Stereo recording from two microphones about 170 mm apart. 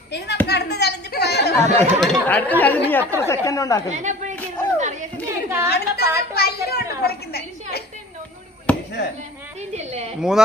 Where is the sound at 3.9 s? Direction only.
45° right (ahead or behind).